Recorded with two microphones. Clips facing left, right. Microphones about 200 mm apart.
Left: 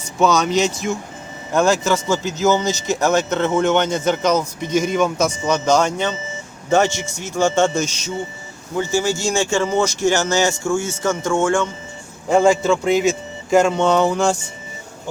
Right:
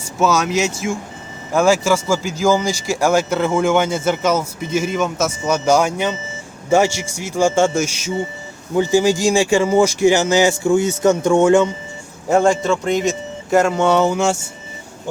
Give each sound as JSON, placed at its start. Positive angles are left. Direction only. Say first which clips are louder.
{"t": 0.2, "sound": "a man's voice", "louder": "left 1 dB", "side_deg": -5}
{"t": 12.3, "sound": "a man's voice", "louder": "even", "side_deg": 0}